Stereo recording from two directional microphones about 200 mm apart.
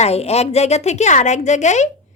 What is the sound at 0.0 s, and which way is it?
Speech, 30° left (ahead or behind).